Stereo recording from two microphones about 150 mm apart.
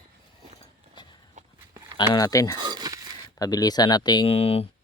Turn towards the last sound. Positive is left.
turn(degrees=40)  # may be behind; listen again after turning